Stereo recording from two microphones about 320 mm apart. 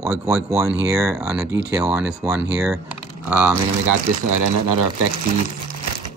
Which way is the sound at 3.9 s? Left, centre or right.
Right.